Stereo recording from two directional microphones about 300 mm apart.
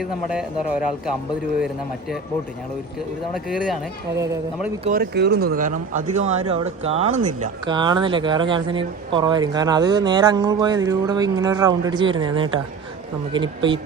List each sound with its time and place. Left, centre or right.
0.0 s speech: centre
3.3 s speech: centre
4.8 s speech: right